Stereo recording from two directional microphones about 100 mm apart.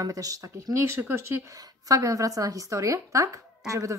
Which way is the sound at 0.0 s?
35° right (ahead or behind).